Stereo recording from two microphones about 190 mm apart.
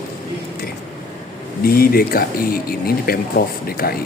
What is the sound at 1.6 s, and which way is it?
Speech, 50° left (ahead or behind).